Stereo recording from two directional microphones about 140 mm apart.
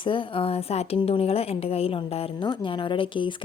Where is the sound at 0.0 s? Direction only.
35° left (ahead or behind).